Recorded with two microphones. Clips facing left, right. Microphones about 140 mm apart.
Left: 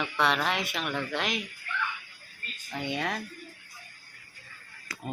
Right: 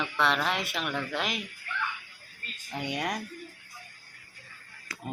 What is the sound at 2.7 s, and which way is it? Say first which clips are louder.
Speech: even; 15° right (ahead or behind).